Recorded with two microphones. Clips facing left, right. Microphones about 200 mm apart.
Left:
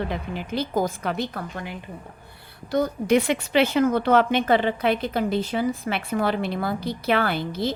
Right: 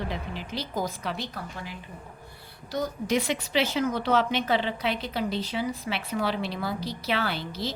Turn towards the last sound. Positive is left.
turn(degrees=55)  # may be behind; listen again after turning